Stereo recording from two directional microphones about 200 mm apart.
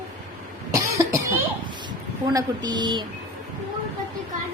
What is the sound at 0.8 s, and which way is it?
Cough, 15° right (ahead or behind).